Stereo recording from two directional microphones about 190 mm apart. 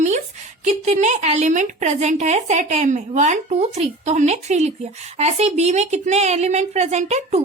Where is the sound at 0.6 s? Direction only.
40° right (ahead or behind).